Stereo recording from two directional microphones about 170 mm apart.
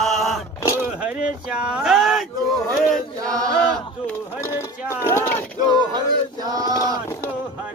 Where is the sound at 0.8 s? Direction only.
5° right (ahead or behind).